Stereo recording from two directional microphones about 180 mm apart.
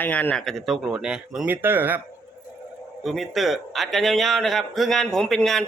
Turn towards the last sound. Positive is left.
turn(degrees=5)  # may be behind; listen again after turning